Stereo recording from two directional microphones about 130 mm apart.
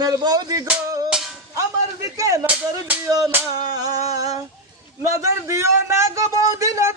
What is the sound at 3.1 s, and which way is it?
Speech, 30° right (ahead or behind).